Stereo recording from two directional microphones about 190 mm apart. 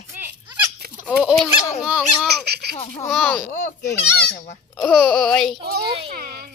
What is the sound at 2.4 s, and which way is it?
Speech, 60° right (ahead or behind).